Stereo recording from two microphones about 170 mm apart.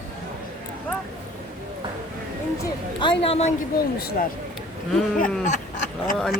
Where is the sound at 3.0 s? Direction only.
30° left (ahead or behind).